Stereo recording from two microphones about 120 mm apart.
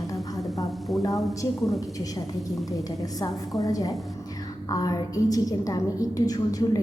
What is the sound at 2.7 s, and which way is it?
A woman's voice, 30° left (ahead or behind).